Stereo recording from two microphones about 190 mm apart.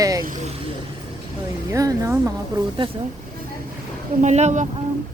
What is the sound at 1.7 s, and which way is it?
Speech, 15° right (ahead or behind).